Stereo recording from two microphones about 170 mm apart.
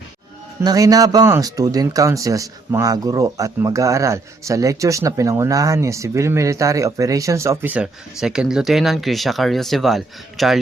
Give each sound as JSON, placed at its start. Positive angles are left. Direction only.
{"t": 0.6, "sound": "speech", "side_deg": -20}